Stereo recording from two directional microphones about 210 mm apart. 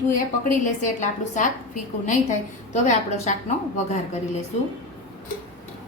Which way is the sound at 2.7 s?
30° left (ahead or behind).